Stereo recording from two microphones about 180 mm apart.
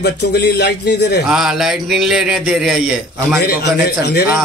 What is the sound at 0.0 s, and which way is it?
Speech, 65° left (ahead or behind).